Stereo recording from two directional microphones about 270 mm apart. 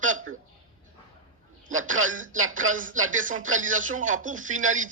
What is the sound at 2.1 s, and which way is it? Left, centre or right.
Speech, right.